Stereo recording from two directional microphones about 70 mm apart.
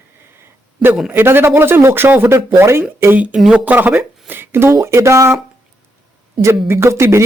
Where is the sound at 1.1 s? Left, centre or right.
Right.